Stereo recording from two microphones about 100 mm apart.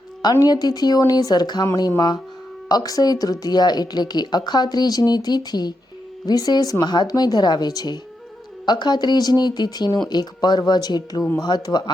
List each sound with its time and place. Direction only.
0.2 s speech: 45° left (ahead or behind)